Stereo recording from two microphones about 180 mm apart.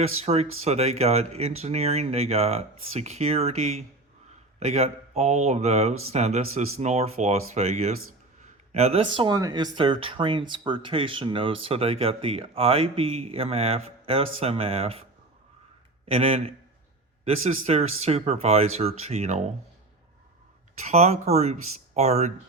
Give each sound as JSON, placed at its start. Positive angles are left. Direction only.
{"t": 0.0, "sound": "speech", "side_deg": -35}
{"t": 16.0, "sound": "speech", "side_deg": -35}
{"t": 20.8, "sound": "speech", "side_deg": -35}